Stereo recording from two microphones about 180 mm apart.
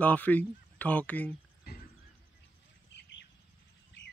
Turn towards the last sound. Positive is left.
turn(degrees=75)  # may be behind; listen again after turning